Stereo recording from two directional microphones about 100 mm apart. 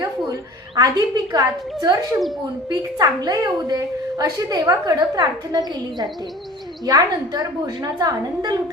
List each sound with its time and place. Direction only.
0.8 s a woman's voice: 45° right (ahead or behind)